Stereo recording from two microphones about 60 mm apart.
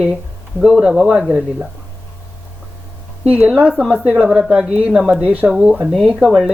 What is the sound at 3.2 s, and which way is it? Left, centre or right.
Speech, right.